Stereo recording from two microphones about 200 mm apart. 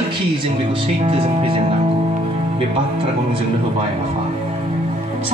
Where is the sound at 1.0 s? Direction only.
25° right (ahead or behind).